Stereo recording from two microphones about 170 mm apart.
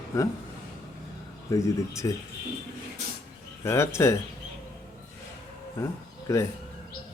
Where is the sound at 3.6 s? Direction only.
15° left (ahead or behind).